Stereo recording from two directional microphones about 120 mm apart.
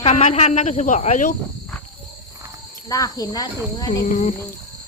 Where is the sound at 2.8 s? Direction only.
30° left (ahead or behind).